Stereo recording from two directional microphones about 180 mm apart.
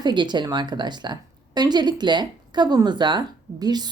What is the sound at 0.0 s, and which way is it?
Speech, 25° right (ahead or behind).